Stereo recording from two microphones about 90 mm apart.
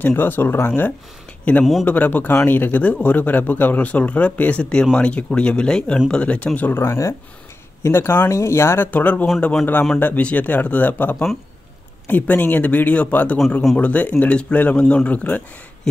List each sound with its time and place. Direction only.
0.0 s speech: 20° left (ahead or behind)
6.8 s speech: 35° left (ahead or behind); by 15.4 s 15° left (ahead or behind)